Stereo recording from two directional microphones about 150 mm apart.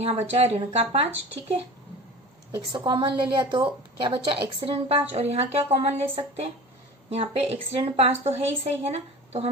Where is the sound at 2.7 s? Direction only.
30° right (ahead or behind).